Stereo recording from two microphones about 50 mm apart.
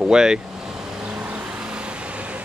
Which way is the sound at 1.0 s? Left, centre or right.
Right.